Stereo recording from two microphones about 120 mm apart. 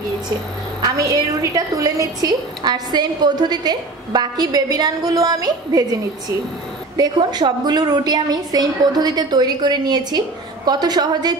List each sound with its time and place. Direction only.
0.8 s a woman's voice: 30° right (ahead or behind)
7.0 s a woman's voice: 35° right (ahead or behind)